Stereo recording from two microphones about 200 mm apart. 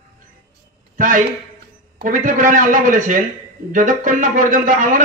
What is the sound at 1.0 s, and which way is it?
A man's voice, 40° right (ahead or behind).